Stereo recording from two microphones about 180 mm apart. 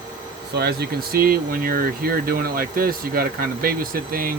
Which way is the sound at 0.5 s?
60° right (ahead or behind).